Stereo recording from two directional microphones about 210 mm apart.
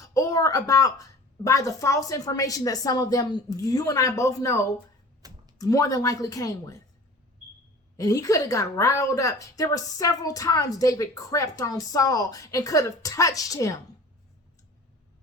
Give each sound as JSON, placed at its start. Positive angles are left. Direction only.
{"t": 0.1, "sound": "a woman's voice", "side_deg": 15}
{"t": 5.2, "sound": "a sound", "side_deg": -20}
{"t": 5.5, "sound": "a woman's voice", "side_deg": 15}
{"t": 7.9, "sound": "a woman's voice", "side_deg": 15}